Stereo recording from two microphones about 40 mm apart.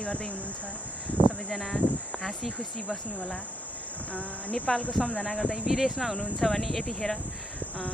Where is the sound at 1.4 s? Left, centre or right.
Centre.